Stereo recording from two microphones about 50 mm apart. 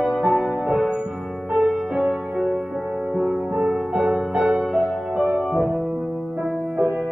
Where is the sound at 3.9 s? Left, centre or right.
Right.